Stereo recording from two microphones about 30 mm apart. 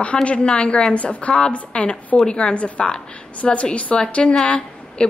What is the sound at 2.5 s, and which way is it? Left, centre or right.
Speech, left.